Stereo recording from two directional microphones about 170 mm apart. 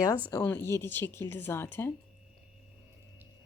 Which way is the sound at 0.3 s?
15° left (ahead or behind).